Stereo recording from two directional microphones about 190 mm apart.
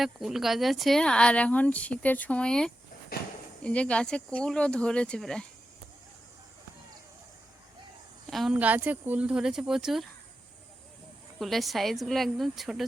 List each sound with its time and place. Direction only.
0.0 s speech: centre (ahead or behind)
8.3 s speech: centre (ahead or behind)
11.3 s speech: centre (ahead or behind)